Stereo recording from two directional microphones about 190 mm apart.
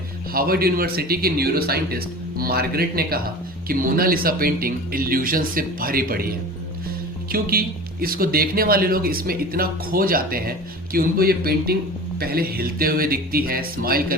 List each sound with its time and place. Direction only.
0.3 s speech: 50° right (ahead or behind)